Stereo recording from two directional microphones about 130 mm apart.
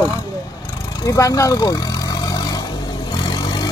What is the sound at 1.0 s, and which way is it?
Vehicle, 25° left (ahead or behind).